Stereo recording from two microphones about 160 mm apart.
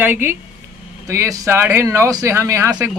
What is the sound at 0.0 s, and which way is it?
Speech, 15° right (ahead or behind).